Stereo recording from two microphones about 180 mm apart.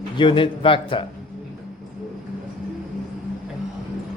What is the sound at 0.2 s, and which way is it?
Speech, 30° left (ahead or behind).